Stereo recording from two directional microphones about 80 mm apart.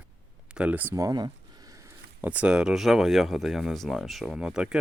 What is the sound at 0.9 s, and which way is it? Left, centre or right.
Speech, right.